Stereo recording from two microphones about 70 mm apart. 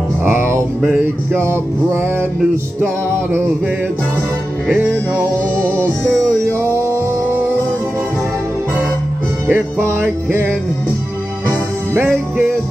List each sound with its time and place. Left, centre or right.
1.3 s music: right
4.6 s music: right
9.5 s music: right